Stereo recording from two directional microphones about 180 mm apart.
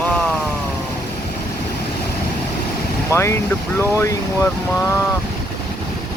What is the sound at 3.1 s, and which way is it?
Speech, 15° left (ahead or behind).